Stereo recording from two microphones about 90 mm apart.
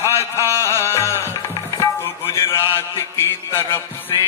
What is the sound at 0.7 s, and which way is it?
Music, 30° left (ahead or behind).